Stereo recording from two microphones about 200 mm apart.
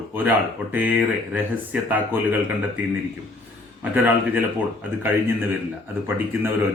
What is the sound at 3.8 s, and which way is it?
Speech, 10° right (ahead or behind).